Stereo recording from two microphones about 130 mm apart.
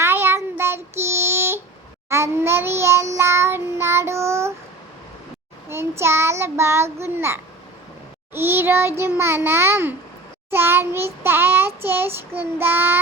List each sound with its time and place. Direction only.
0.0 s child singing: 15° right (ahead or behind)
5.6 s child singing: 20° right (ahead or behind)